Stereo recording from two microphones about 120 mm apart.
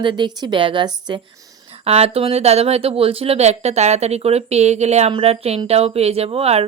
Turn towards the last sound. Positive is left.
turn(degrees=-55)  # may be behind; listen again after turning